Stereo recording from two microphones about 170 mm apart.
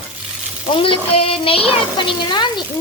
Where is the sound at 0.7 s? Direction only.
30° left (ahead or behind).